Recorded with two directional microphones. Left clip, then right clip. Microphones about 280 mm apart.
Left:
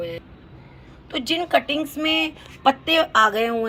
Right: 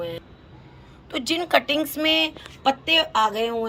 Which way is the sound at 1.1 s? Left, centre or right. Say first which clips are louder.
Left 1 dB; centre.